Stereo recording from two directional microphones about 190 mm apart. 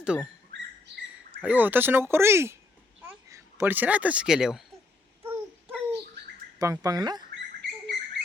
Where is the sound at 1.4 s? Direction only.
10° right (ahead or behind).